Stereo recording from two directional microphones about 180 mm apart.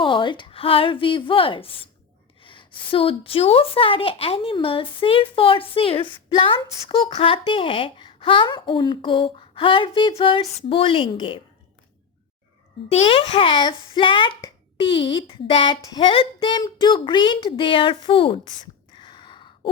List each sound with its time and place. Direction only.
0.0 s a woman's voice: 25° left (ahead or behind)
12.9 s a child's voice: 35° left (ahead or behind)
18.9 s a sound: 25° left (ahead or behind)